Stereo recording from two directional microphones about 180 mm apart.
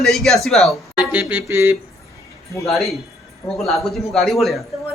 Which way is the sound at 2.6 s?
Centre (ahead or behind).